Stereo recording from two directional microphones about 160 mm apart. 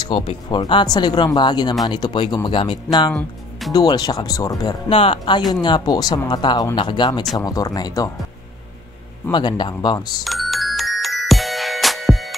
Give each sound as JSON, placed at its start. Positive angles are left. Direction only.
{"t": 0.0, "sound": "speech", "side_deg": 30}
{"t": 3.1, "sound": "speech", "side_deg": 5}
{"t": 3.7, "sound": "speech", "side_deg": 25}
{"t": 4.8, "sound": "speech", "side_deg": 35}
{"t": 9.3, "sound": "speech", "side_deg": 30}
{"t": 10.2, "sound": "music", "side_deg": 0}